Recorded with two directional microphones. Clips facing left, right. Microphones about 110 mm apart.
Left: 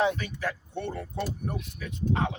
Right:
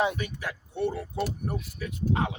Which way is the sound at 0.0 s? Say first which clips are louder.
Left 1 dB; 10° right (ahead or behind).